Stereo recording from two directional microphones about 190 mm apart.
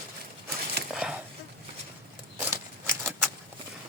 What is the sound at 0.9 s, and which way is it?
Chopping, 5° right (ahead or behind).